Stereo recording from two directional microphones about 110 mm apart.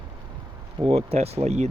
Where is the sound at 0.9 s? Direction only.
70° right (ahead or behind).